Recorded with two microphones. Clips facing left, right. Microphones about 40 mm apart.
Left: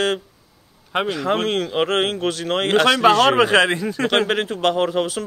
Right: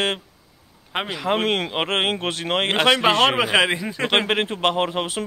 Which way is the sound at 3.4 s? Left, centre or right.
Centre.